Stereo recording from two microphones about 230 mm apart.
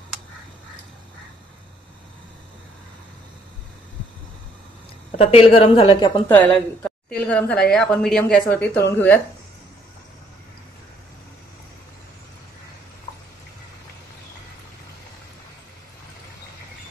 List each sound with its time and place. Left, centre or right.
5.1 s a woman's voice: left
6.2 s speech: centre